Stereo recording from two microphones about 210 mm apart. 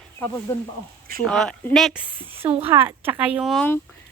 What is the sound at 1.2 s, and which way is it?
A woman's voice, 5° left (ahead or behind).